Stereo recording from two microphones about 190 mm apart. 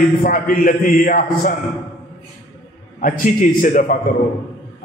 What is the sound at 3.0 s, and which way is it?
A man's voice, 45° left (ahead or behind).